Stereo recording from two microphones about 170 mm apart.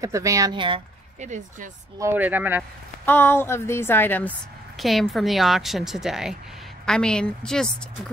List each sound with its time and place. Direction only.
0.0 s speech: 20° right (ahead or behind)
1.2 s speech: 45° right (ahead or behind)
2.0 s speech: 15° right (ahead or behind)
3.1 s a woman's voice: 15° left (ahead or behind)